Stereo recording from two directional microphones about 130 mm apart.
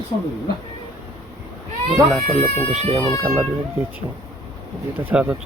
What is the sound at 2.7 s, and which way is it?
Speech, 55° right (ahead or behind).